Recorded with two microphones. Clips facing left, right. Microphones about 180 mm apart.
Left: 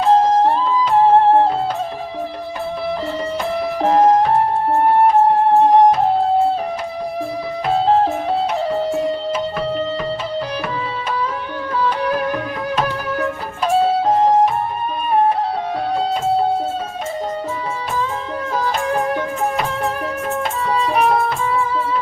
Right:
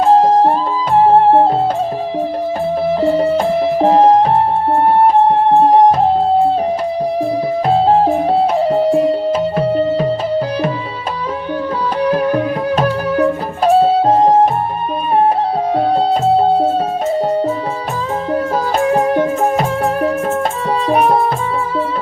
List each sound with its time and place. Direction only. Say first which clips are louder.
0.0 s music: right 3 dB; 35° right (ahead or behind)
3.0 s music: right 9 dB; 40° right (ahead or behind)
7.7 s music: right 3 dB; 35° right (ahead or behind)
12.1 s music: right 6 dB; 40° right (ahead or behind)
15.7 s music: right 8 dB; 35° right (ahead or behind)
18.8 s music: right 10 dB; 30° right (ahead or behind)